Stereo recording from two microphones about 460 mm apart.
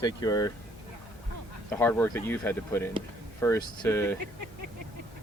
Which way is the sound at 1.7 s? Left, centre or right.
Centre.